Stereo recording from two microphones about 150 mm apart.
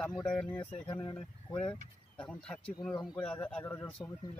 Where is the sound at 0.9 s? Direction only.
35° left (ahead or behind).